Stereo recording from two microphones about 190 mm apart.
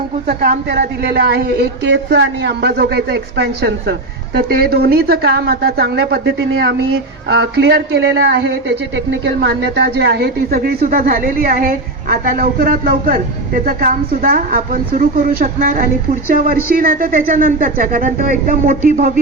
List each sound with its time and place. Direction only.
0.7 s a woman's voice: 60° right (ahead or behind)